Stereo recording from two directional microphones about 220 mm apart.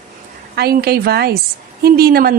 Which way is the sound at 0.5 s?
45° right (ahead or behind).